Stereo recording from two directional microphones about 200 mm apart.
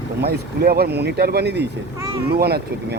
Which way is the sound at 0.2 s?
50° right (ahead or behind).